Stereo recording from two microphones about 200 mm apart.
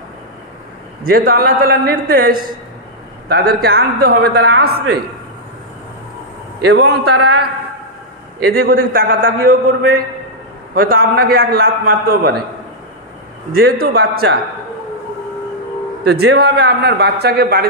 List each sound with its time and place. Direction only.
1.0 s a man's voice: 45° right (ahead or behind)
6.6 s a man's voice: 55° right (ahead or behind)
8.5 s a man's voice: 45° right (ahead or behind)
13.5 s a man's voice: 50° right (ahead or behind)
16.0 s a man's voice: 55° right (ahead or behind)